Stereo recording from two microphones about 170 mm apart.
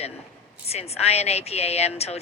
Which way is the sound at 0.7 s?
40° left (ahead or behind).